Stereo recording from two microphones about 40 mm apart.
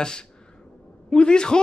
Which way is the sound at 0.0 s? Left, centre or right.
Centre.